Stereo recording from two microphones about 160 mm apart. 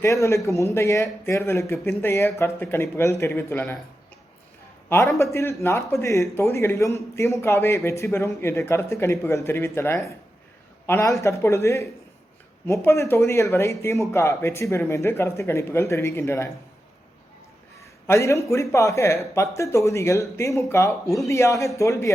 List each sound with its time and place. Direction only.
0.0 s speech: 20° left (ahead or behind)
5.1 s speech: 20° left (ahead or behind)
18.0 s speech: 20° left (ahead or behind)